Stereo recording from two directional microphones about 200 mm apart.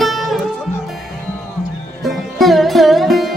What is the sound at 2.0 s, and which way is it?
Music, centre (ahead or behind).